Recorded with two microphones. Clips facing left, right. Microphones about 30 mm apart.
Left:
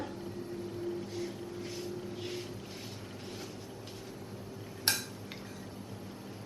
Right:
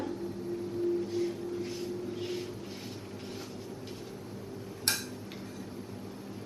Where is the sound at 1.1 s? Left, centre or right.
Centre.